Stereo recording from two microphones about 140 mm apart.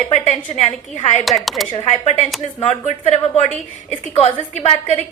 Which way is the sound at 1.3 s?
Centre (ahead or behind).